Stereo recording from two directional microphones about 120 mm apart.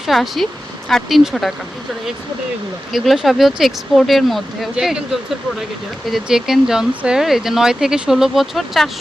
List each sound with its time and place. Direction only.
0.1 s speech: centre (ahead or behind)
2.9 s speech: centre (ahead or behind)
6.1 s speech: 5° right (ahead or behind)